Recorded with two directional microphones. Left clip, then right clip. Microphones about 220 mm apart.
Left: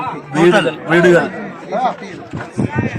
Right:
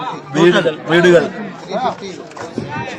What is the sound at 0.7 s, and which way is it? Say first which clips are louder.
Speech: even; 5° right (ahead or behind).